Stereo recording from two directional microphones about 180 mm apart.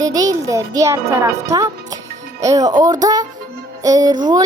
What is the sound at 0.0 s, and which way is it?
A child's voice, 20° right (ahead or behind).